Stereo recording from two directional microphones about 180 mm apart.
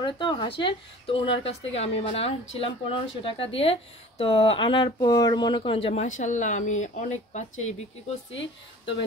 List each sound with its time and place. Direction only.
0.0 s speech: 25° left (ahead or behind)
6.0 s speech: 45° left (ahead or behind)